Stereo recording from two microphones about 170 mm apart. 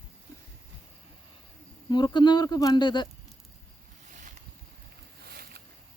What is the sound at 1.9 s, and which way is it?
Speech, 25° left (ahead or behind).